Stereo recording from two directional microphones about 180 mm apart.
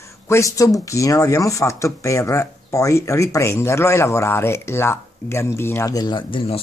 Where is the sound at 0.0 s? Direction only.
15° left (ahead or behind).